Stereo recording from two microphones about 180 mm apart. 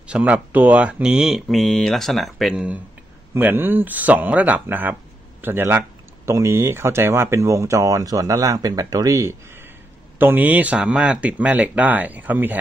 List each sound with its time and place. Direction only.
0.0 s speech: 5° right (ahead or behind)